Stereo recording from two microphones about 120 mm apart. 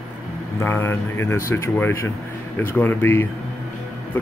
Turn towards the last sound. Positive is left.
turn(degrees=15)  # may be behind; listen again after turning